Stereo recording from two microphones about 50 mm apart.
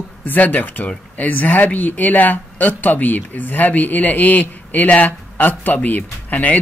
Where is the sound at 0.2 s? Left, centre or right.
Left.